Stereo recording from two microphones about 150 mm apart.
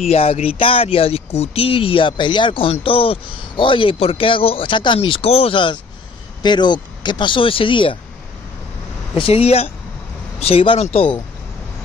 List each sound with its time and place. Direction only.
0.1 s speech: 40° left (ahead or behind)
9.2 s speech: 40° left (ahead or behind)